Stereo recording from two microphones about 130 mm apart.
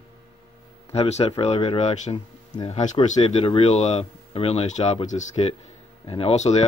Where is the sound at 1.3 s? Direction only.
40° left (ahead or behind).